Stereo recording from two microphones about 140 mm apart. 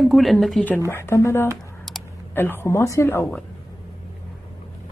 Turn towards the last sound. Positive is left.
turn(degrees=15)  # may be behind; listen again after turning